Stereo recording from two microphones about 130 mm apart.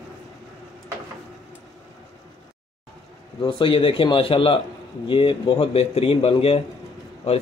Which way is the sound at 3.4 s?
40° left (ahead or behind).